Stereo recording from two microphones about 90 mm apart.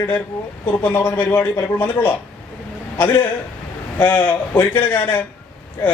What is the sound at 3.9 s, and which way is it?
Speech, 20° left (ahead or behind).